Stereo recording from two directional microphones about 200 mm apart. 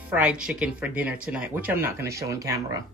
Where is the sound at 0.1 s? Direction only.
5° right (ahead or behind).